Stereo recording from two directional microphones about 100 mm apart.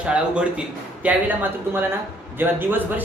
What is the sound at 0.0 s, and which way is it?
A man's voice, 10° right (ahead or behind).